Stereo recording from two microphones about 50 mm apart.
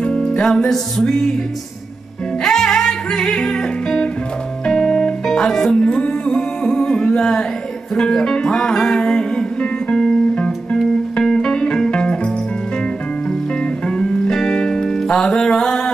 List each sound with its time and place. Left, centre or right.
0.0 s music: centre
2.4 s music: centre
13.8 s music: centre